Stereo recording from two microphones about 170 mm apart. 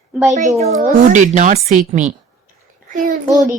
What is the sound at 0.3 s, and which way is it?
Speech, 45° right (ahead or behind).